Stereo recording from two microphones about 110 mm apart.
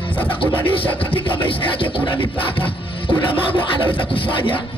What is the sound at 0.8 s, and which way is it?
Speech, 55° left (ahead or behind).